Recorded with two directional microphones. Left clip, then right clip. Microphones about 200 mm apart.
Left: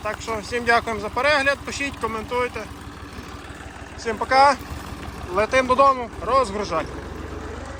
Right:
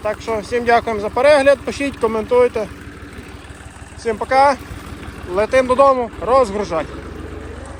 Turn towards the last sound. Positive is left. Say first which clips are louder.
# right 5 dB
turn(degrees=10)  # may be behind; listen again after turning